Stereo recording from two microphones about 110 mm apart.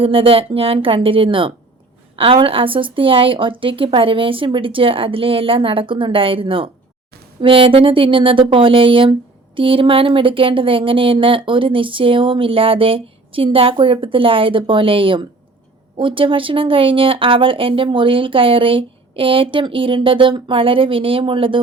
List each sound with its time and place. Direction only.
0.0 s speech: 55° right (ahead or behind)